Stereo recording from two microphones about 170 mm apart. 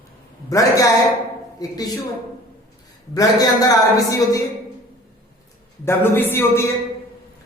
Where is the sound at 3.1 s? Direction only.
20° left (ahead or behind).